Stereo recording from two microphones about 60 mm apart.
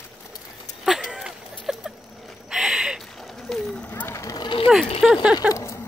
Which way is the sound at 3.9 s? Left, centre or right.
Left.